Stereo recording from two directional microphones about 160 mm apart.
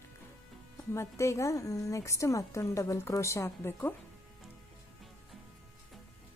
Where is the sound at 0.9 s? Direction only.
20° left (ahead or behind).